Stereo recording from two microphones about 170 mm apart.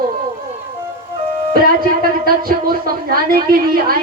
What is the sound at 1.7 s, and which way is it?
Speech, 60° right (ahead or behind).